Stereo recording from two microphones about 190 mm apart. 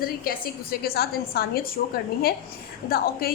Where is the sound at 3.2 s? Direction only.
50° left (ahead or behind).